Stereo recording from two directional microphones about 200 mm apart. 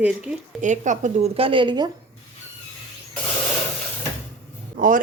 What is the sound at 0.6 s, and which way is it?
Speech, 40° right (ahead or behind).